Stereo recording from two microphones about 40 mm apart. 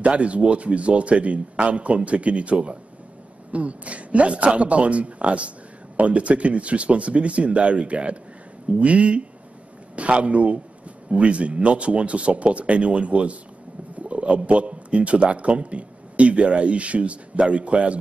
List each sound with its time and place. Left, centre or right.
0.0 s speech: right